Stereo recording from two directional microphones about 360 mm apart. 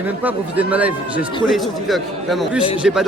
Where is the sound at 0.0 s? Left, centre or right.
Centre.